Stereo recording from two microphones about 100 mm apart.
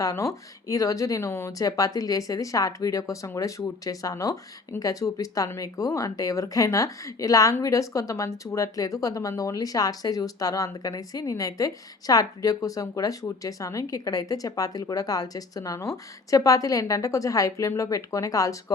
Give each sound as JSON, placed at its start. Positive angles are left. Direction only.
{"t": 0.0, "sound": "speech", "side_deg": 35}